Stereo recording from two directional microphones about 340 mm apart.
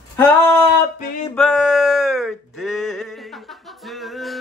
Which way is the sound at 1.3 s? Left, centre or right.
Centre.